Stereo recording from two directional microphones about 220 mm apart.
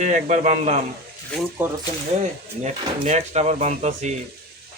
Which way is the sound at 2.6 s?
30° right (ahead or behind).